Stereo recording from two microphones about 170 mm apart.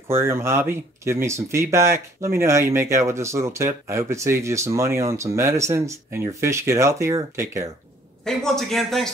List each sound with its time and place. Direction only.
0.1 s speech: 15° right (ahead or behind)
8.2 s speech: centre (ahead or behind)